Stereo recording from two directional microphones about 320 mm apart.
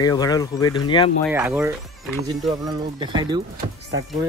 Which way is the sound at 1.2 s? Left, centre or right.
Centre.